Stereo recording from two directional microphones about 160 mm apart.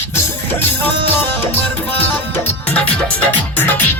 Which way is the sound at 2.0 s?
10° left (ahead or behind).